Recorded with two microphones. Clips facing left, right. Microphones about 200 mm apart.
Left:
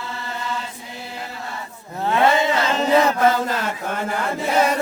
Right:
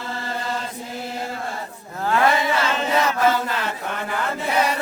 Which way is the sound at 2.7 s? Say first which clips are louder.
Left 4 dB; 35° left (ahead or behind).